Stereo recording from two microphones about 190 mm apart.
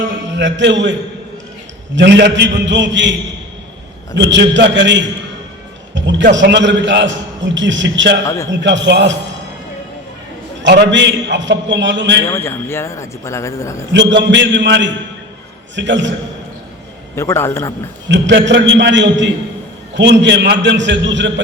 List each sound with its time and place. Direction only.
0.0 s a man's voice: 75° right (ahead or behind)
2.0 s a man's voice: 65° right (ahead or behind)
5.9 s music: 75° right (ahead or behind)
6.3 s a man's voice: 70° right (ahead or behind)
10.6 s a man's voice: 70° right (ahead or behind)
12.3 s speech: 15° left (ahead or behind)
13.9 s a man's voice: 70° right (ahead or behind)
17.2 s speech: 15° left (ahead or behind)
18.1 s a man's voice: 70° right (ahead or behind)